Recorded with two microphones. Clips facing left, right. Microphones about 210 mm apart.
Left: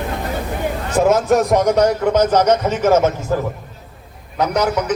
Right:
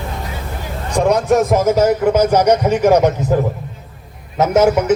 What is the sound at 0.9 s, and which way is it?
A man's voice, centre (ahead or behind).